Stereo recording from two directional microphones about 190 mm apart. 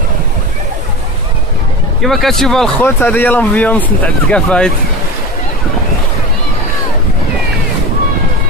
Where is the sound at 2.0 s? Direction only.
Centre (ahead or behind).